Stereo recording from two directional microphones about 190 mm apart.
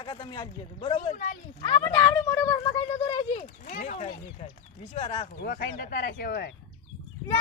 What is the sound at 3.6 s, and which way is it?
Speech, 40° left (ahead or behind).